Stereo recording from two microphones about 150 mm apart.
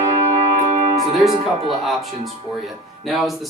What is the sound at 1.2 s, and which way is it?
Music, centre (ahead or behind).